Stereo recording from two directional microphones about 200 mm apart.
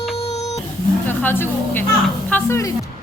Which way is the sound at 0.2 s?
30° left (ahead or behind).